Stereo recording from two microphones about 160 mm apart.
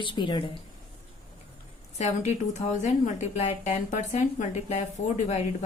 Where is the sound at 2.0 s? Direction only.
45° left (ahead or behind).